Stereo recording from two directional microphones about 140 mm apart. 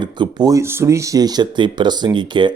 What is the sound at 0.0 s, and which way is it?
Speech, 30° right (ahead or behind).